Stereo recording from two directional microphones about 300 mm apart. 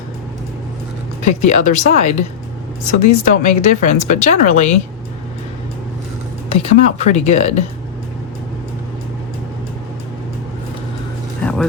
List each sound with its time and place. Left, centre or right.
1.2 s speech: left
6.5 s speech: left